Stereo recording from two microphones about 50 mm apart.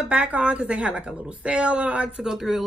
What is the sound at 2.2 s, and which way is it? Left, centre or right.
Speech, centre.